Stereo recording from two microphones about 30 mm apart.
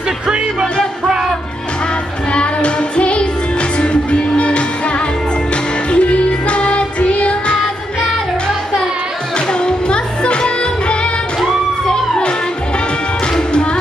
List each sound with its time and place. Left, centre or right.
2.3 s music: left
5.9 s music: left
9.5 s music: left